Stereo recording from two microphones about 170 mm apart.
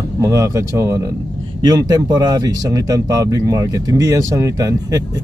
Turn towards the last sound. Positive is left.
turn(degrees=-20)  # may be behind; listen again after turning